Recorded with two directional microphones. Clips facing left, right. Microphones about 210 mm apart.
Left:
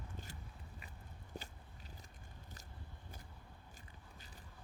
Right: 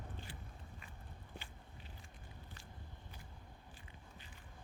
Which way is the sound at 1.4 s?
40° left (ahead or behind).